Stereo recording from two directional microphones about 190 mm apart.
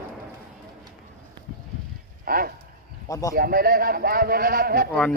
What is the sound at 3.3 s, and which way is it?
A man's voice, 50° right (ahead or behind).